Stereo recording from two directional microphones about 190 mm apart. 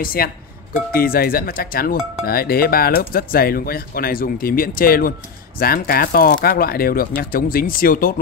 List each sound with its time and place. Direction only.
0.0 s speech: 50° left (ahead or behind)